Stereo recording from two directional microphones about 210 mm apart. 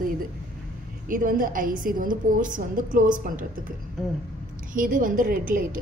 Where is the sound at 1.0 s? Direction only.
40° right (ahead or behind).